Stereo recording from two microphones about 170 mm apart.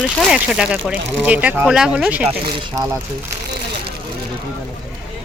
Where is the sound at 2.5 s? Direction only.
25° right (ahead or behind).